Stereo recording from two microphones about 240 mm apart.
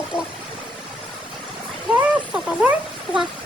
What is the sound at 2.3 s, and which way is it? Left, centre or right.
Speech, centre.